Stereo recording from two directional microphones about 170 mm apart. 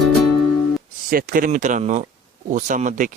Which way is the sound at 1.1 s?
55° right (ahead or behind).